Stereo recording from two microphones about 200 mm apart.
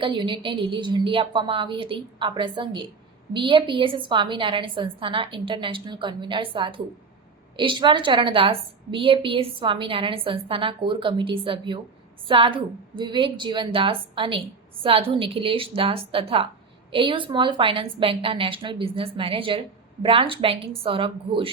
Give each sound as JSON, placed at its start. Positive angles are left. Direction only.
{"t": 0.0, "sound": "a woman's voice", "side_deg": -25}